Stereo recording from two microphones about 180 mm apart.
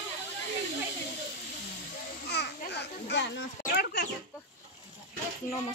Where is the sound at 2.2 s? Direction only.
65° left (ahead or behind).